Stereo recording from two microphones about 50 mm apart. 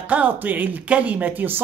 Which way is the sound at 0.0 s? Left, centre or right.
Right.